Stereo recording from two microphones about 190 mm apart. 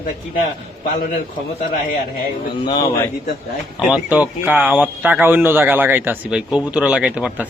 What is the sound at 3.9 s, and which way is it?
Speech, 5° right (ahead or behind).